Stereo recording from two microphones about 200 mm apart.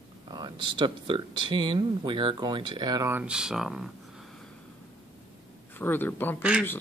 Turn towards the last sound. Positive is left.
turn(degrees=-5)  # may be behind; listen again after turning